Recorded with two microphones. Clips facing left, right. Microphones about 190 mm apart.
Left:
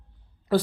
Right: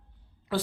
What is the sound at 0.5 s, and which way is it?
Speech, 40° left (ahead or behind).